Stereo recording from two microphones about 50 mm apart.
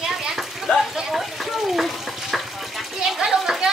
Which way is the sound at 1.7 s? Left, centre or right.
Centre.